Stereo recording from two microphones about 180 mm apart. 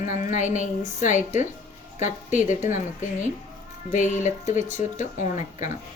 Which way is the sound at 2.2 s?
45° left (ahead or behind).